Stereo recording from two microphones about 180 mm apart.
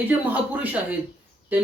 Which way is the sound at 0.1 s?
10° right (ahead or behind).